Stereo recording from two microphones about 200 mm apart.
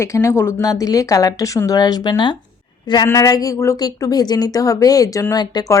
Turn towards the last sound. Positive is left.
turn(degrees=15)  # may be behind; listen again after turning